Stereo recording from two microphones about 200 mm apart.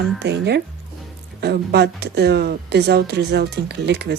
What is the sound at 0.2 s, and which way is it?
Speech, 55° right (ahead or behind).